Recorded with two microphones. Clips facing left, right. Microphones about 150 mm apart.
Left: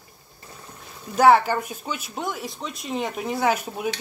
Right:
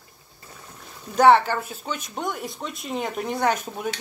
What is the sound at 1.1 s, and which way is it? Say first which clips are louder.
Speech: even; 10° left (ahead or behind).